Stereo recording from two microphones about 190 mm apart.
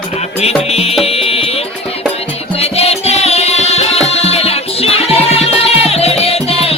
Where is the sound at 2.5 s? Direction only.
30° left (ahead or behind).